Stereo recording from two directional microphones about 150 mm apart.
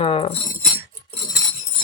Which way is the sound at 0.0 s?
35° left (ahead or behind).